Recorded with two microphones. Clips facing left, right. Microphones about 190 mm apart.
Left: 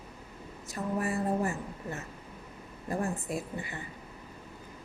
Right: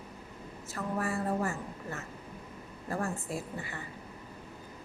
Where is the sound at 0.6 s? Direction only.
20° left (ahead or behind).